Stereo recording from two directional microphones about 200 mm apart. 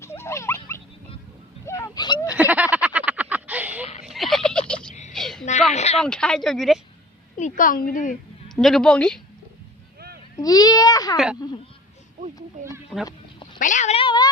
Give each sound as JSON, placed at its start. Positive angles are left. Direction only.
{"t": 0.0, "sound": "dog", "side_deg": 15}
{"t": 1.6, "sound": "a sound", "side_deg": 15}
{"t": 2.3, "sound": "a sound", "side_deg": -5}
{"t": 5.7, "sound": "a sound", "side_deg": 35}
{"t": 6.0, "sound": "speech", "side_deg": 5}
{"t": 7.3, "sound": "a woman's voice", "side_deg": 40}
{"t": 8.4, "sound": "a woman's voice", "side_deg": 0}
{"t": 10.3, "sound": "a child's voice", "side_deg": 20}
{"t": 13.1, "sound": "quack", "side_deg": 25}
{"t": 13.6, "sound": "speech", "side_deg": 40}